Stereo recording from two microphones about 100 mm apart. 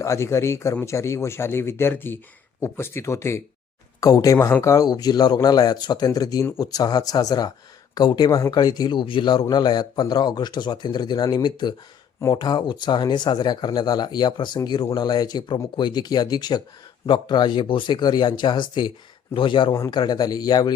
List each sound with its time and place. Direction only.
0.0 s speech: 30° left (ahead or behind); by 8.3 s 45° left (ahead or behind)
8.3 s speech: 30° left (ahead or behind)
8.5 s speech: 45° left (ahead or behind)
19.3 s speech: 60° left (ahead or behind)
19.9 s speech: 45° left (ahead or behind)